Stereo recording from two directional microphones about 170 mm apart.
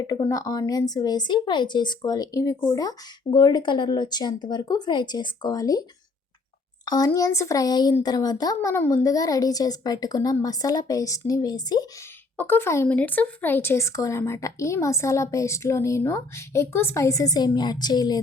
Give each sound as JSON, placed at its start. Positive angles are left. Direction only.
{"t": 0.0, "sound": "speech", "side_deg": 20}
{"t": 6.8, "sound": "speech", "side_deg": 20}
{"t": 12.4, "sound": "speech", "side_deg": 10}